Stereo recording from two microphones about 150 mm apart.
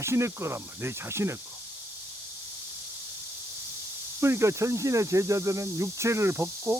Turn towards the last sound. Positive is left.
turn(degrees=-15)  # may be behind; listen again after turning